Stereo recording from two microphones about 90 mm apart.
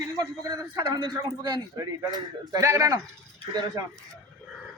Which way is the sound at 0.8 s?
55° right (ahead or behind).